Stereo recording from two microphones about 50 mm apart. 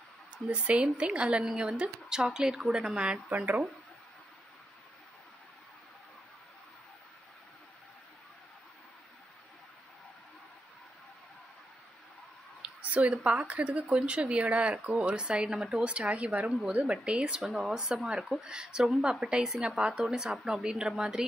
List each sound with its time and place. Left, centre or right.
0.5 s speech: right
3.3 s speech: right
12.6 s a sound: right
13.1 s speech: right
15.8 s speech: right
17.6 s speech: centre